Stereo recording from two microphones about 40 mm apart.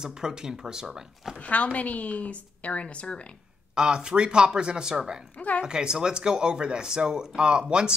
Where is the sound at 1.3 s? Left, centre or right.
Left.